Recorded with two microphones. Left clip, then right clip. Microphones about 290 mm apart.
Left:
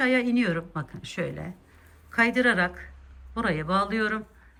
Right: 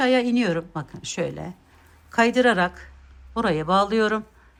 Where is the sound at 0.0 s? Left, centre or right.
Centre.